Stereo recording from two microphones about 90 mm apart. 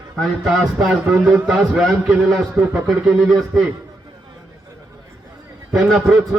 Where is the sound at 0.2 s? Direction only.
Centre (ahead or behind).